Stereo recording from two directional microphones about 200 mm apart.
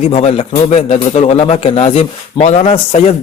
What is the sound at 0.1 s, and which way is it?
A man's voice, 30° left (ahead or behind).